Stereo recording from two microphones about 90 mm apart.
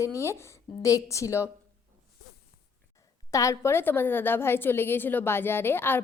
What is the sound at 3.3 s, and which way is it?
A woman's voice, 35° left (ahead or behind).